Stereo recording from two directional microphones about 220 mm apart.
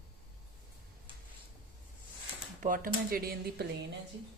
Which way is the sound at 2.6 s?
40° right (ahead or behind).